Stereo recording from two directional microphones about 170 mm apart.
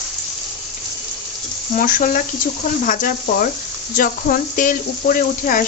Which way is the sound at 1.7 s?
55° left (ahead or behind).